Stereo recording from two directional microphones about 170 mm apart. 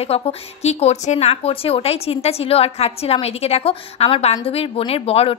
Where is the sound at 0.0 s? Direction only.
35° left (ahead or behind).